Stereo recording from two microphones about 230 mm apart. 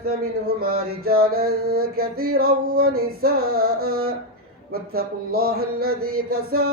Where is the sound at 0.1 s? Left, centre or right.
Right.